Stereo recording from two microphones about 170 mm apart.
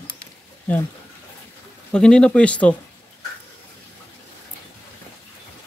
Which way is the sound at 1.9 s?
5° left (ahead or behind).